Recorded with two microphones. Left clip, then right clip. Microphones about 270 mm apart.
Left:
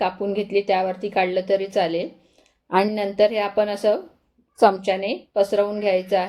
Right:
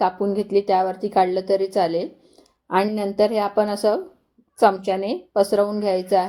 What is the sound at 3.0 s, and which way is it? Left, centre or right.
Speech, right.